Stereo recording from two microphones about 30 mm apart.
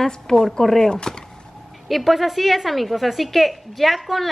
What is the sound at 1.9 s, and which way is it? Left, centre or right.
A woman's voice, centre.